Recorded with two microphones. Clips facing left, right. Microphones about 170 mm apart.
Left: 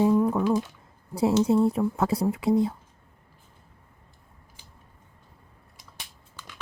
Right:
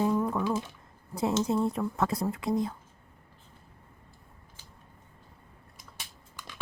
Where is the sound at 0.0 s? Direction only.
15° left (ahead or behind).